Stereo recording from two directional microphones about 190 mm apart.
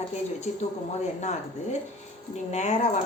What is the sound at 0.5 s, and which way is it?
Speech, 40° left (ahead or behind).